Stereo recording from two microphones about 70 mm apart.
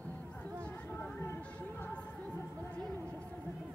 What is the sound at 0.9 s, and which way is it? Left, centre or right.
Music, left.